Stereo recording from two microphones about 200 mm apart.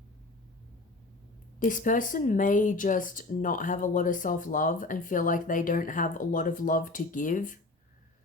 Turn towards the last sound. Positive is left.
turn(degrees=40)  # may be behind; listen again after turning